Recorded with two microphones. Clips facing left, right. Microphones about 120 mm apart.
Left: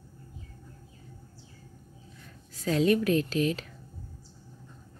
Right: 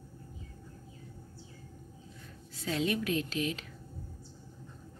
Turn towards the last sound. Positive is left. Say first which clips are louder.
# left 6 dB
turn(degrees=40)  # may be behind; listen again after turning